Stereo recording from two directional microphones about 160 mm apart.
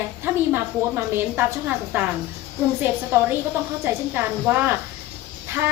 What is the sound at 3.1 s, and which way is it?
A woman's voice, 15° right (ahead or behind).